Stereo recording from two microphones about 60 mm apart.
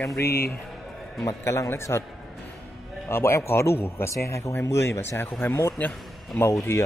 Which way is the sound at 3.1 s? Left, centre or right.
Left.